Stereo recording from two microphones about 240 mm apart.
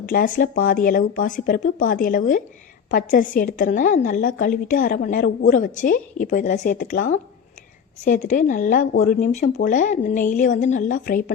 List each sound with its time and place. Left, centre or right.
0.0 s a woman's voice: left